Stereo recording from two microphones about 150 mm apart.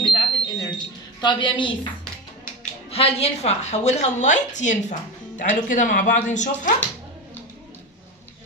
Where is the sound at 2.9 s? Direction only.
40° left (ahead or behind).